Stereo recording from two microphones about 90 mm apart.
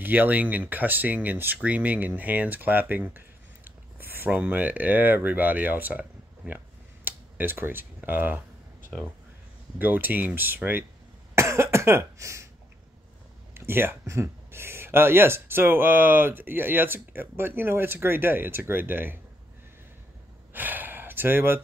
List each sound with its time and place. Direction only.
0.0 s speech: 20° right (ahead or behind)
9.8 s speech: 20° right (ahead or behind)
11.3 s cough: 30° right (ahead or behind)
13.6 s speech: 25° right (ahead or behind)
20.5 s gasp: 20° right (ahead or behind)